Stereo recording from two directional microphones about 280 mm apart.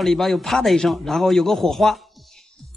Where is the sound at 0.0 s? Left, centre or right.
Centre.